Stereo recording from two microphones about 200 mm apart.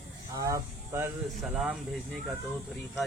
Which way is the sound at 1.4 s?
Centre (ahead or behind).